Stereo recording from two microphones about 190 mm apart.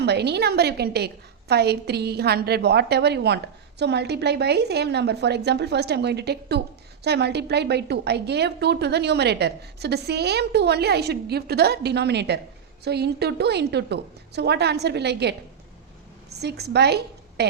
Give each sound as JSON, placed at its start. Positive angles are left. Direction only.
{"t": 0.0, "sound": "a woman's voice", "side_deg": -60}
{"t": 16.4, "sound": "a woman's voice", "side_deg": -60}